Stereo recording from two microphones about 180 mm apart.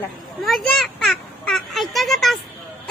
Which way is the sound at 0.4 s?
Centre (ahead or behind).